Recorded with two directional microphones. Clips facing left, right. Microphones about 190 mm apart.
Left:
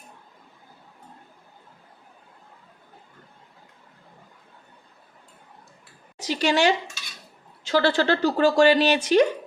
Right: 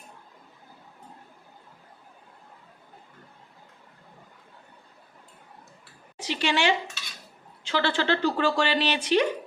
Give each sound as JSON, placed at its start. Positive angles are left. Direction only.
{"t": 6.1, "sound": "speech", "side_deg": 40}